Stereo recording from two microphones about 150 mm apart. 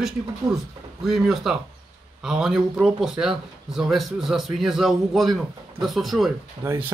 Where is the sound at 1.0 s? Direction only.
Centre (ahead or behind).